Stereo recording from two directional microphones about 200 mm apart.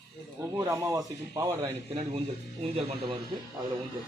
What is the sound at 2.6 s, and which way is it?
Speech, 30° right (ahead or behind).